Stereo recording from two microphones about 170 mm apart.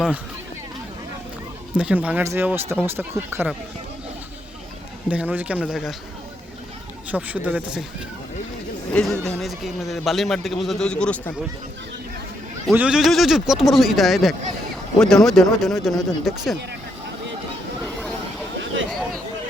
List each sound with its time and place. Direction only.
1.7 s speech: 10° right (ahead or behind)
5.0 s speech: 10° right (ahead or behind)
7.1 s speech: 10° right (ahead or behind)
8.9 s a man's voice: 5° left (ahead or behind)
12.7 s a man's voice: 5° right (ahead or behind)
18.6 s a sound: 90° right
18.9 s a sound: centre (ahead or behind)